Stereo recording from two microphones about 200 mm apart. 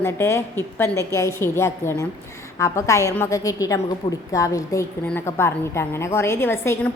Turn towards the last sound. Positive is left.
turn(degrees=10)  # may be behind; listen again after turning